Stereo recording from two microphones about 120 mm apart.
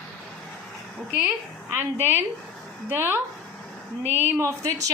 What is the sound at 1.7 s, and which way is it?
A woman's voice, 15° right (ahead or behind).